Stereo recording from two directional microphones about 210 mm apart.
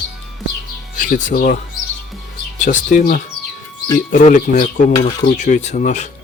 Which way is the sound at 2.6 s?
35° left (ahead or behind).